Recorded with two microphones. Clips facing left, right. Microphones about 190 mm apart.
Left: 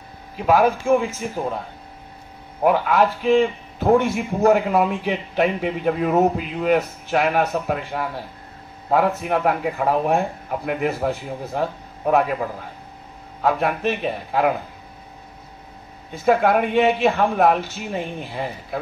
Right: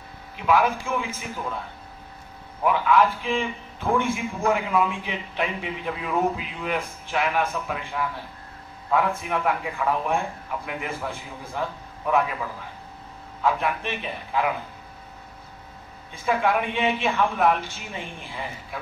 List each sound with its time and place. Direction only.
0.4 s a man's voice: 40° left (ahead or behind)
2.6 s a man's voice: 45° left (ahead or behind)
16.3 s a man's voice: 45° left (ahead or behind)